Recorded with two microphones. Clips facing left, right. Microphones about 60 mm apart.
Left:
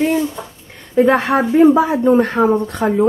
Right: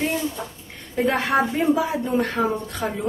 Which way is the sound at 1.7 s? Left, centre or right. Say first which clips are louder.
Left 9 dB; left.